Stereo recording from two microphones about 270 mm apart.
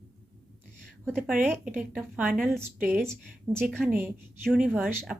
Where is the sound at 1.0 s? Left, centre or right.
Centre.